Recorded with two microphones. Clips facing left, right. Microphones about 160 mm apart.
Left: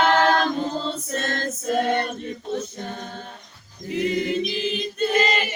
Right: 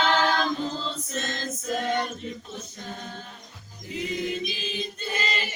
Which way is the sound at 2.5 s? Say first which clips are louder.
Left 9 dB; 55° left (ahead or behind).